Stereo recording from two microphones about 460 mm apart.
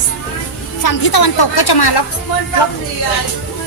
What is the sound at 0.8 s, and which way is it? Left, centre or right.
A woman's voice, left.